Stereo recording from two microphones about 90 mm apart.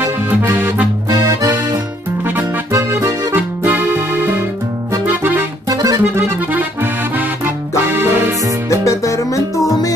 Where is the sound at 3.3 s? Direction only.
20° right (ahead or behind).